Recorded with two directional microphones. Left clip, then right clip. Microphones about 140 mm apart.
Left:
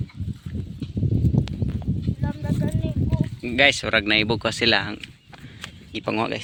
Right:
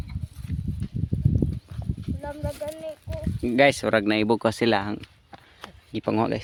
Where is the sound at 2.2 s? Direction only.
85° right.